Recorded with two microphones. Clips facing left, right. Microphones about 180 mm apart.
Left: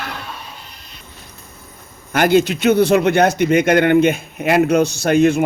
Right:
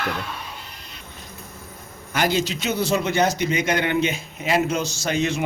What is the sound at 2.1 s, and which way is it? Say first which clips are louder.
A man's voice: left 8 dB; 55° left (ahead or behind).